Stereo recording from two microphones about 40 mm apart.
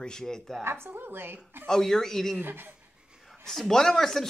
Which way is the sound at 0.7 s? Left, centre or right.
Right.